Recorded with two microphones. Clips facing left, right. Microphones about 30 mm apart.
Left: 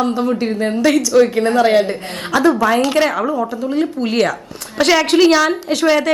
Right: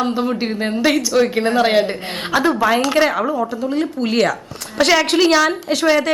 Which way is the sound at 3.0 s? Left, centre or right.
Centre.